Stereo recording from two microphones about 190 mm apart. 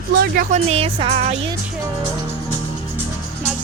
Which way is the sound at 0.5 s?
30° right (ahead or behind).